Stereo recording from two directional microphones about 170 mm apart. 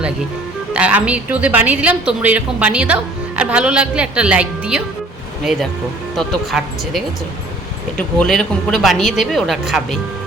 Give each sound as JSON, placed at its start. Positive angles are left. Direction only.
{"t": 0.7, "sound": "a woman's voice", "side_deg": -5}
{"t": 8.2, "sound": "speech", "side_deg": 5}